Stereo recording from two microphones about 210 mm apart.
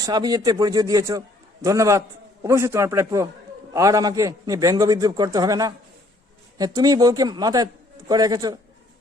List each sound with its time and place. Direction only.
0.0 s a man's voice: 20° right (ahead or behind)